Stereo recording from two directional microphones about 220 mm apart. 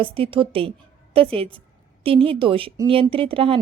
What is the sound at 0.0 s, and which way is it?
A woman's voice, 25° right (ahead or behind).